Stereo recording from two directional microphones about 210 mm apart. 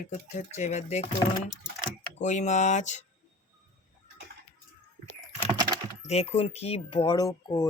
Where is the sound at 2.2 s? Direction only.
35° left (ahead or behind).